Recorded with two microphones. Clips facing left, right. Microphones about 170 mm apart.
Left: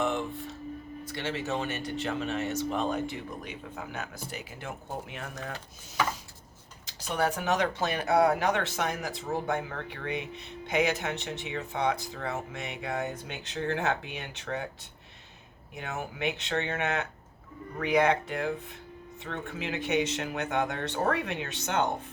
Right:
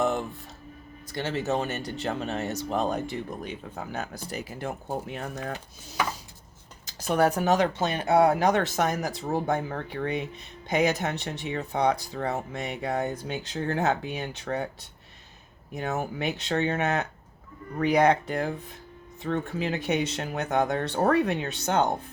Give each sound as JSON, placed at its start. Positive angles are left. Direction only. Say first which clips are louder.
{"t": 0.0, "sound": "music", "louder": "right 3 dB", "side_deg": -40}
{"t": 1.0, "sound": "speech", "louder": "right 5 dB", "side_deg": -40}
{"t": 6.8, "sound": "speech", "louder": "right 6 dB", "side_deg": -45}
{"t": 15.7, "sound": "speech", "louder": "right 7 dB", "side_deg": -40}